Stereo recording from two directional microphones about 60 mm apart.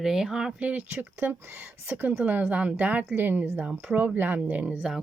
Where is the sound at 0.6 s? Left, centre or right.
Right.